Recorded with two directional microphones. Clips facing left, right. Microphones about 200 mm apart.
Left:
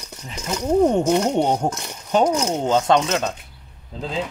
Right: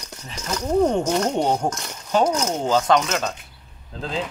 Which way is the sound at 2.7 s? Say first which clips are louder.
Left 1 dB; 25° left (ahead or behind).